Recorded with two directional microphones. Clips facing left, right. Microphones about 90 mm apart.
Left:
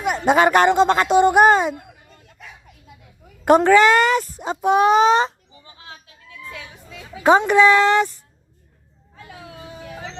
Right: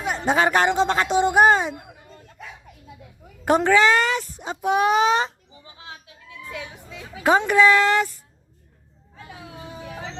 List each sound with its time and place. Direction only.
0.0 s speech: 65° left (ahead or behind)
1.7 s a sound: 30° right (ahead or behind)
3.4 s speech: 55° left (ahead or behind); by 5.3 s 35° left (ahead or behind)
5.5 s children playing: 15° right (ahead or behind)
7.2 s speech: 25° left (ahead or behind)
9.1 s music: 20° right (ahead or behind)